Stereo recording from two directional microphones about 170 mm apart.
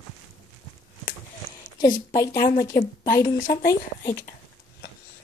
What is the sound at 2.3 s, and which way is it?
Speech, 65° left (ahead or behind).